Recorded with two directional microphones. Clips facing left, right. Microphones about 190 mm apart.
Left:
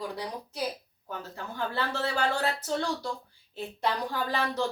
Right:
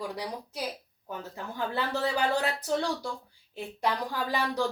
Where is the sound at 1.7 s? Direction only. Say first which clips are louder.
Right 3 dB; 15° right (ahead or behind).